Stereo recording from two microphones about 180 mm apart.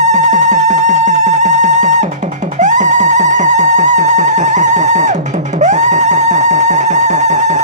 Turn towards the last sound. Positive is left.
turn(degrees=-40)  # may be behind; listen again after turning